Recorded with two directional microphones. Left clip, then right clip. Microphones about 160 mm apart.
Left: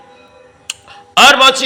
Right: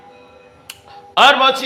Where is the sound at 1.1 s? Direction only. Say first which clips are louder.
Left 4 dB; 15° left (ahead or behind).